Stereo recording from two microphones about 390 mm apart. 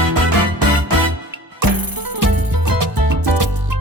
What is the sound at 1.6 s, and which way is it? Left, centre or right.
Music, right.